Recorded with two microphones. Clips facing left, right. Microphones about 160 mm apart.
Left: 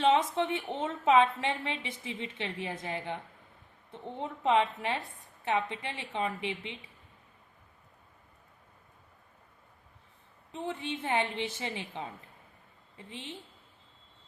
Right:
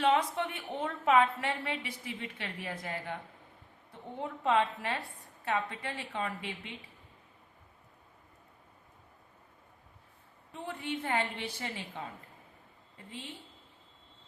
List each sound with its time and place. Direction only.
0.0 s a woman's voice: 25° left (ahead or behind)
4.2 s a woman's voice: 20° left (ahead or behind)
10.5 s a woman's voice: 20° left (ahead or behind)
13.1 s a woman's voice: 20° left (ahead or behind)